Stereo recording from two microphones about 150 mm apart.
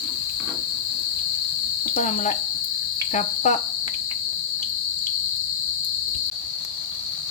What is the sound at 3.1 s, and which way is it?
Cricket, 50° left (ahead or behind).